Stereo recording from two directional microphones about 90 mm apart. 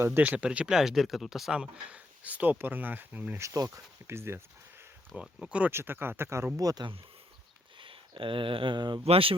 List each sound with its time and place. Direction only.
0.2 s speech: 15° right (ahead or behind)
3.4 s speech: 40° right (ahead or behind)
4.0 s speech: 30° right (ahead or behind)
5.1 s speech: 10° right (ahead or behind)
5.7 s speech: 25° right (ahead or behind)
6.6 s speech: 40° right (ahead or behind)
7.8 s speech: 70° right (ahead or behind); by 9.0 s 55° right (ahead or behind)
9.0 s speech: 90° right